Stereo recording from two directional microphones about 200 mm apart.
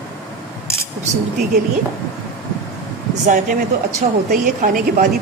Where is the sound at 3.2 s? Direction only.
40° right (ahead or behind).